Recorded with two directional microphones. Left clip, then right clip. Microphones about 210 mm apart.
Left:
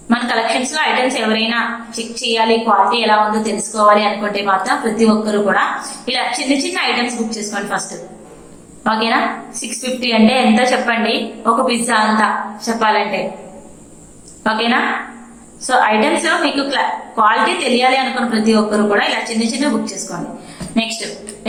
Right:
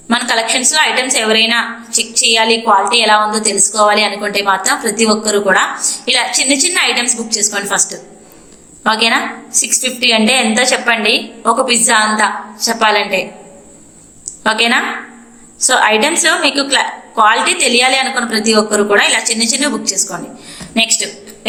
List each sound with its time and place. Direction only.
0.1 s a woman's voice: 45° right (ahead or behind)
8.8 s a woman's voice: 45° right (ahead or behind)
14.4 s a woman's voice: 45° right (ahead or behind)